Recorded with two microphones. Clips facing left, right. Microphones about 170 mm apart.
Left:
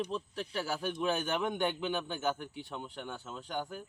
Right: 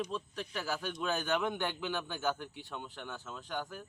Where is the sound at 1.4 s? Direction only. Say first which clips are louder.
Left 3 dB; 15° left (ahead or behind).